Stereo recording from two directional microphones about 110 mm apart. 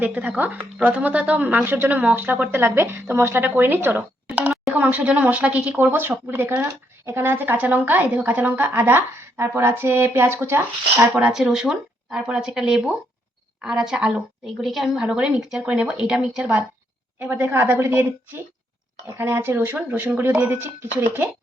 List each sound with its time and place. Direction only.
0.0 s speech: 15° right (ahead or behind)
11.3 s speech: 5° right (ahead or behind)
17.2 s speech: 15° right (ahead or behind)
19.1 s speech: 20° right (ahead or behind)